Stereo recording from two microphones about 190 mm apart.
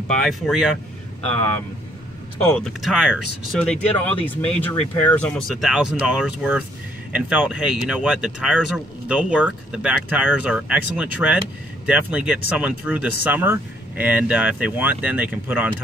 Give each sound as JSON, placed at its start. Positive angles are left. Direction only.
{"t": 0.1, "sound": "speech", "side_deg": 0}
{"t": 2.5, "sound": "speech", "side_deg": 0}